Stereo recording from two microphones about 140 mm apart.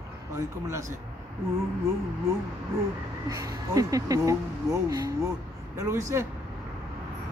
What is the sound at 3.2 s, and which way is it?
A man's voice, 25° right (ahead or behind).